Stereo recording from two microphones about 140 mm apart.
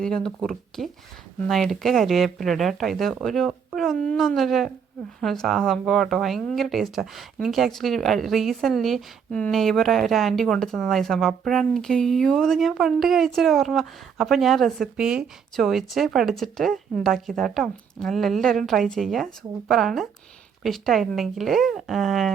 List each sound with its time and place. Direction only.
0.0 s a woman's voice: 5° left (ahead or behind)